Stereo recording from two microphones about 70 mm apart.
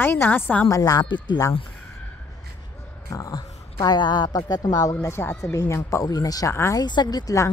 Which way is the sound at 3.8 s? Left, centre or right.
Left.